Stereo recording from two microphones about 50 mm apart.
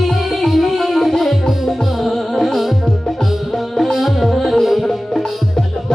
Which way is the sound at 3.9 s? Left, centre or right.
Centre.